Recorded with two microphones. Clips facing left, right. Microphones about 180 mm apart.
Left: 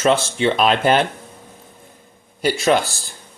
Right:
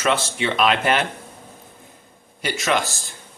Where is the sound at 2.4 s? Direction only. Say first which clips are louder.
Left 6 dB; 35° left (ahead or behind).